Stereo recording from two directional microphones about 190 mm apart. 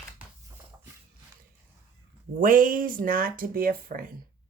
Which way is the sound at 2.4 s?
45° right (ahead or behind).